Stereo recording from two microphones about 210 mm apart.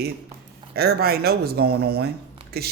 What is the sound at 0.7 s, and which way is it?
Speech, 50° right (ahead or behind).